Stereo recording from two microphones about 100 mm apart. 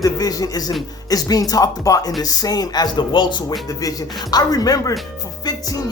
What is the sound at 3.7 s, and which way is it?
Speech, 35° left (ahead or behind).